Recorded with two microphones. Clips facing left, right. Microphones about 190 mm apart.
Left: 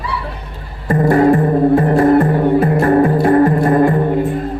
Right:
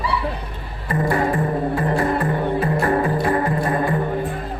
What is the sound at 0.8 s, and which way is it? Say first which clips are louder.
Music: left 9 dB; 45° left (ahead or behind).